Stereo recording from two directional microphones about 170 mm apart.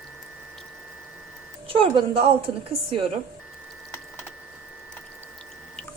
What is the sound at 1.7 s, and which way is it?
Speech, 30° right (ahead or behind).